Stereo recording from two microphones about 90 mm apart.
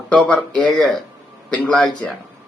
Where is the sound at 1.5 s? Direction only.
10° left (ahead or behind).